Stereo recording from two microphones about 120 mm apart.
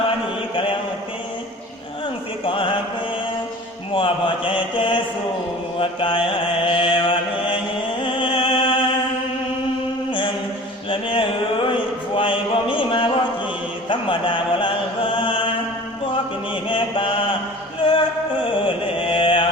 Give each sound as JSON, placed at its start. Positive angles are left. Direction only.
{"t": 0.5, "sound": "mantra", "side_deg": 45}
{"t": 2.4, "sound": "music", "side_deg": 45}
{"t": 3.9, "sound": "mantra", "side_deg": 45}
{"t": 8.0, "sound": "music", "side_deg": 45}
{"t": 10.1, "sound": "mantra", "side_deg": 45}
{"t": 10.8, "sound": "a sound", "side_deg": 45}
{"t": 13.8, "sound": "music", "side_deg": 45}
{"t": 15.1, "sound": "mantra", "side_deg": 45}
{"t": 16.6, "sound": "mantra", "side_deg": 45}
{"t": 17.8, "sound": "music", "side_deg": 45}